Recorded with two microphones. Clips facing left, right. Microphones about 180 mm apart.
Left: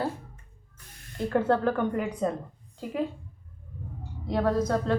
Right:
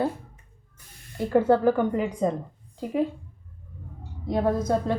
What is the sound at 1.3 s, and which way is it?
A woman's voice, 10° right (ahead or behind).